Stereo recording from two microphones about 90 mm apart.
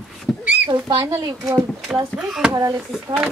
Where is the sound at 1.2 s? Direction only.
35° right (ahead or behind).